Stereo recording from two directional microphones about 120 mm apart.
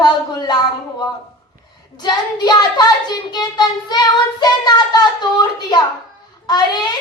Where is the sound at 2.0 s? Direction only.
35° left (ahead or behind).